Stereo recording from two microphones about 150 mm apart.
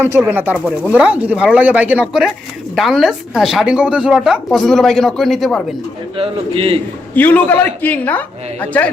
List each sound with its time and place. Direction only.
0.0 s speech: 15° right (ahead or behind); by 5.6 s centre (ahead or behind)
6.1 s a man's voice: 40° right (ahead or behind)
7.1 s a man's voice: 10° left (ahead or behind)